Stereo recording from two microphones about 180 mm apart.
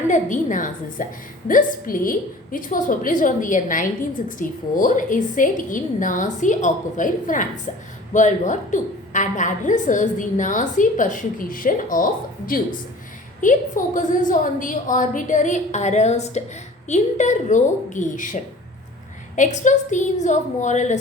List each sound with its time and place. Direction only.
0.1 s a woman's voice: 45° left (ahead or behind)
13.4 s a woman's voice: 45° left (ahead or behind)
19.4 s a woman's voice: 45° left (ahead or behind)